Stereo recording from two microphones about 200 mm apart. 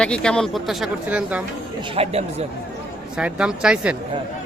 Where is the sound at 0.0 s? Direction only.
5° left (ahead or behind).